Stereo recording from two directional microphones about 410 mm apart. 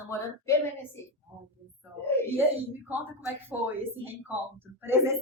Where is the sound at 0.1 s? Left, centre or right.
Centre.